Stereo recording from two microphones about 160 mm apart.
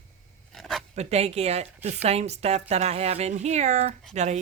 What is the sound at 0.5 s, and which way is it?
Speech, centre (ahead or behind).